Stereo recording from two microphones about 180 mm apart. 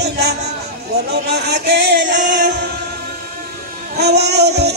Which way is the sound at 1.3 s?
65° right (ahead or behind).